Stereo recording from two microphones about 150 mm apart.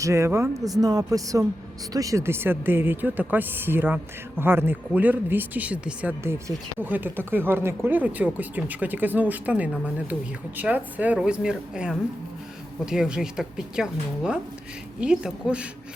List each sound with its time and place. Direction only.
0.0 s a woman's voice: 20° right (ahead or behind)